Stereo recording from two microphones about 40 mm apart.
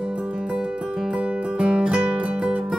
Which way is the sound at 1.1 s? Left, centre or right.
Right.